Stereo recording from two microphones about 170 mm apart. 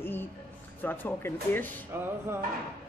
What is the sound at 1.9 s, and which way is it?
Speech, 15° right (ahead or behind).